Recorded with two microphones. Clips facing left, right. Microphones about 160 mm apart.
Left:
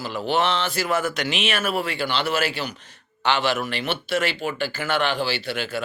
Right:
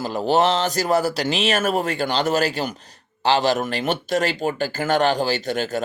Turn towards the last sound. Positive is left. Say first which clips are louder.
# right 4 dB
turn(degrees=-40)  # may be behind; listen again after turning